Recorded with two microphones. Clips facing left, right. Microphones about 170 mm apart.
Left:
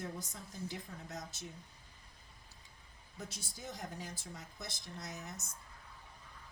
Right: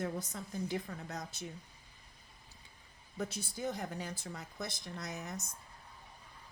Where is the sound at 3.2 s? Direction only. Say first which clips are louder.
Right 9 dB; 60° right (ahead or behind).